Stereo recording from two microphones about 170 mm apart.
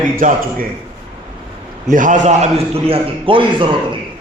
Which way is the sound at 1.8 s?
50° right (ahead or behind).